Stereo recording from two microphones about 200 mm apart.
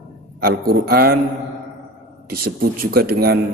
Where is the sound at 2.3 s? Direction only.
50° right (ahead or behind).